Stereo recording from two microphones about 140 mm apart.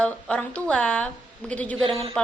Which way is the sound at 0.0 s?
10° left (ahead or behind).